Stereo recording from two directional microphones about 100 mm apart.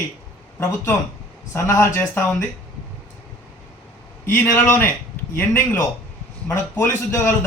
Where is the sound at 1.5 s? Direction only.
25° left (ahead or behind).